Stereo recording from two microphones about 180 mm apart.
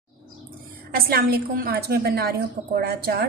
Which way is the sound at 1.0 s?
55° right (ahead or behind).